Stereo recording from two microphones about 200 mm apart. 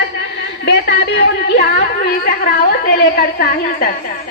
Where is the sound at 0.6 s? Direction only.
55° left (ahead or behind).